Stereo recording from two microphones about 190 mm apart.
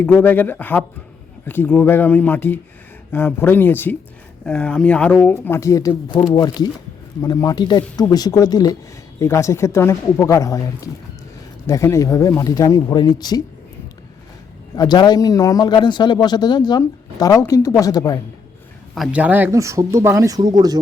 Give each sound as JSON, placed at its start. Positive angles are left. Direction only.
{"t": 0.0, "sound": "speech", "side_deg": 10}
{"t": 14.8, "sound": "speech", "side_deg": 20}
{"t": 18.9, "sound": "speech", "side_deg": -5}